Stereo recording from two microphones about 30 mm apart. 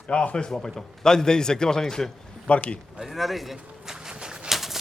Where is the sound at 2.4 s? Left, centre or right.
Left.